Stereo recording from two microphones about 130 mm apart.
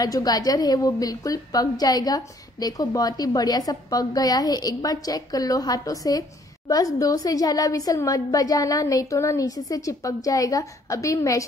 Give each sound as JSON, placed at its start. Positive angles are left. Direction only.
{"t": 0.0, "sound": "a woman's voice", "side_deg": 30}